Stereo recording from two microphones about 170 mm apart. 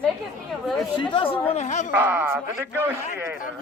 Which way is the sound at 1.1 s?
30° left (ahead or behind).